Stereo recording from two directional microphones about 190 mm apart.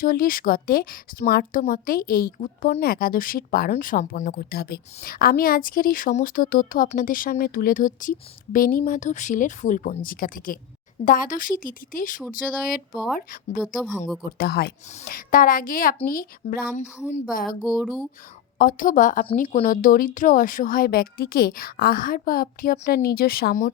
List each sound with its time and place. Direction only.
0.0 s a woman's voice: 50° left (ahead or behind)
14.3 s a woman's voice: 55° left (ahead or behind)
18.6 s a woman's voice: 45° left (ahead or behind)